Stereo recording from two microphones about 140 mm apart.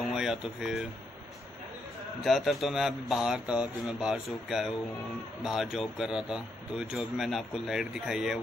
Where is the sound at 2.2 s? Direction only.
Centre (ahead or behind).